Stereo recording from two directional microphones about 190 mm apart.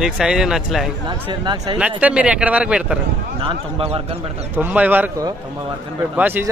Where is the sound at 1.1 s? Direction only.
25° right (ahead or behind).